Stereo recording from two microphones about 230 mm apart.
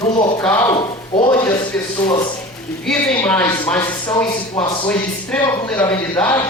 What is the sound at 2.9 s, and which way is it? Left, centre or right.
A man's voice, centre.